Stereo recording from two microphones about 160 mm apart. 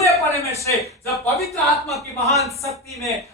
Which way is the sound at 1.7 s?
Centre (ahead or behind).